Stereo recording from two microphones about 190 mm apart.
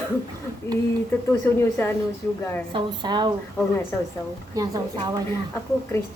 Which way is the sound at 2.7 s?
25° right (ahead or behind).